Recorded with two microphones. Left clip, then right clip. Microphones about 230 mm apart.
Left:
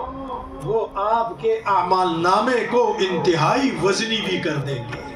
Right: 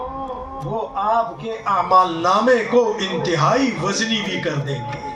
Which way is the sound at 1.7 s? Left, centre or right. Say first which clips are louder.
Right 5 dB; left.